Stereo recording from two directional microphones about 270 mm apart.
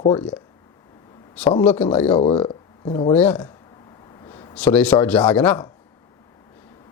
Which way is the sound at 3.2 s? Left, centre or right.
Centre.